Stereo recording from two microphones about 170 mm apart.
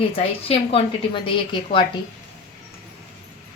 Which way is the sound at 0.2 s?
35° left (ahead or behind).